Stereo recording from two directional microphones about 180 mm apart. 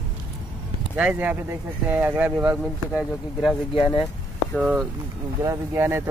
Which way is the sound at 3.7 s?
30° left (ahead or behind).